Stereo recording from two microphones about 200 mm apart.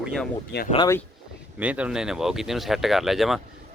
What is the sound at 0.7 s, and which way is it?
Speech, 20° left (ahead or behind).